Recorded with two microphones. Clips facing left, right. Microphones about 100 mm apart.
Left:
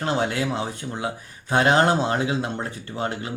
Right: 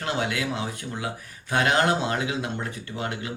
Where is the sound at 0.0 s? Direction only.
30° left (ahead or behind).